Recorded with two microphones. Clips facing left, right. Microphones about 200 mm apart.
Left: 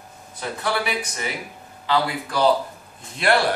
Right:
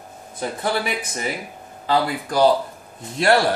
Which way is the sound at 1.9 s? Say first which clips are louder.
Right 2 dB; 40° right (ahead or behind).